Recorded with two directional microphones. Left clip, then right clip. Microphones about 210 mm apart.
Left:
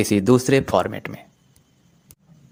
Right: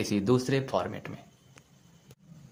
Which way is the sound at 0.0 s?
30° left (ahead or behind).